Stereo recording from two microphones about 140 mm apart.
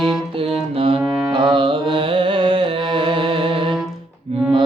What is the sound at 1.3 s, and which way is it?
Carnatic music, 35° right (ahead or behind).